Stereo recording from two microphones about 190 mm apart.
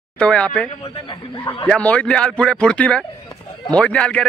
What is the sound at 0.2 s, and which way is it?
Speech, 5° left (ahead or behind).